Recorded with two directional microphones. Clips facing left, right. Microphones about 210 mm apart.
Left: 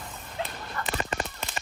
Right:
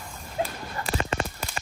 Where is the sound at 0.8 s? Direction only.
Centre (ahead or behind).